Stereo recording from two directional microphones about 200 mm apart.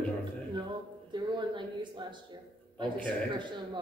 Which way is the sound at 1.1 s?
20° right (ahead or behind).